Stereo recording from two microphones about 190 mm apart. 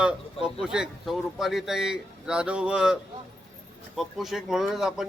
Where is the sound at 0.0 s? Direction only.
5° right (ahead or behind).